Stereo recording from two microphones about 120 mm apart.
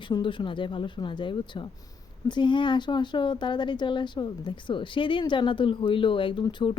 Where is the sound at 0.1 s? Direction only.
45° left (ahead or behind).